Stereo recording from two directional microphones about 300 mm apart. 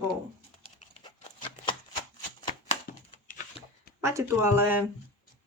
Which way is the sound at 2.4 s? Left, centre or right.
Left.